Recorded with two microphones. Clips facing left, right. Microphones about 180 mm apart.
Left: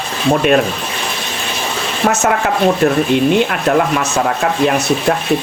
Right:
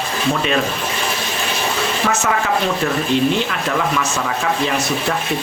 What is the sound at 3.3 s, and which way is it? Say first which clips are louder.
Speech: left 7 dB; 55° left (ahead or behind).